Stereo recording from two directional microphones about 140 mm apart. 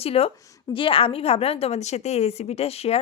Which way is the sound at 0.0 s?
45° left (ahead or behind).